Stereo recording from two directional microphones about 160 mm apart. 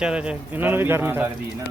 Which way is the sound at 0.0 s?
5° right (ahead or behind).